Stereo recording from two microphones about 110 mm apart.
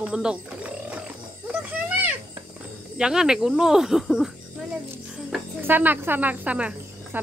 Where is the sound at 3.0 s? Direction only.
5° right (ahead or behind).